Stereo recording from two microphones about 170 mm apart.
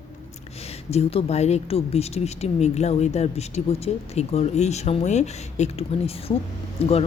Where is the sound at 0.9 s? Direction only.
35° left (ahead or behind).